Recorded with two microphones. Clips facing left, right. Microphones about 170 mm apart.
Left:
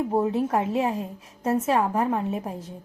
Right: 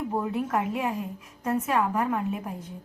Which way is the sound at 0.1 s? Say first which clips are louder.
Left 3 dB; 30° left (ahead or behind).